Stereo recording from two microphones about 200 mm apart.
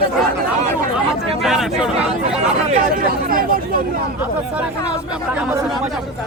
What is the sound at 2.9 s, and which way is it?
Speech, 45° right (ahead or behind).